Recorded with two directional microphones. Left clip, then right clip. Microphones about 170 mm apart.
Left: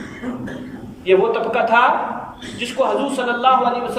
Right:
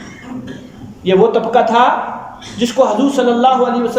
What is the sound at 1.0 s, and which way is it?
Speech, 40° right (ahead or behind).